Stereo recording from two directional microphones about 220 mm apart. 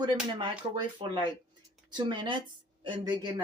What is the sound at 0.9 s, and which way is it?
Speech, 20° right (ahead or behind).